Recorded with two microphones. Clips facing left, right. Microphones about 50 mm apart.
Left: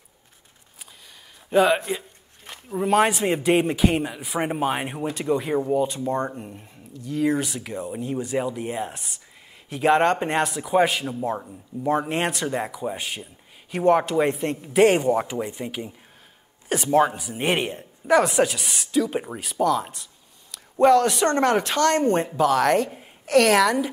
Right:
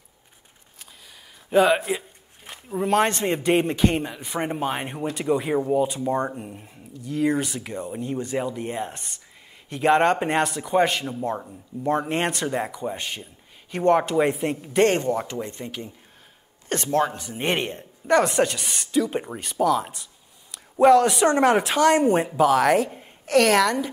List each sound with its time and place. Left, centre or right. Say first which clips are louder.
1.5 s a man's voice: even; centre